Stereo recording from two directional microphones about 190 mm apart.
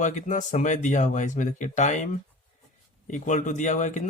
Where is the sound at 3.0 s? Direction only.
40° left (ahead or behind).